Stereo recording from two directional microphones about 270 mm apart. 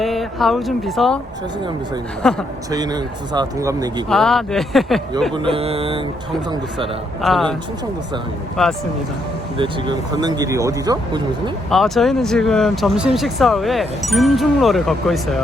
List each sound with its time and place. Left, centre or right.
0.0 s speech: centre
2.2 s speech: centre
2.6 s speech: centre
4.1 s speech: centre
5.3 s speech: centre
7.2 s speech: centre
8.6 s speech: centre
9.6 s speech: centre
11.7 s speech: centre